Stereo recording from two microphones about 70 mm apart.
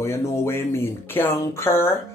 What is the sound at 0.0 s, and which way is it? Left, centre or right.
Speech, left.